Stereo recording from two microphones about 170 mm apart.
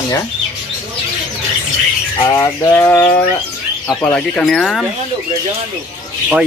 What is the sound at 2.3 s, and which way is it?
Bird, 15° left (ahead or behind).